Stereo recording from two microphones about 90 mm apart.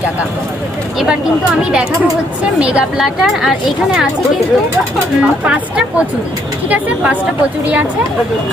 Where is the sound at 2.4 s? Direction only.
15° right (ahead or behind).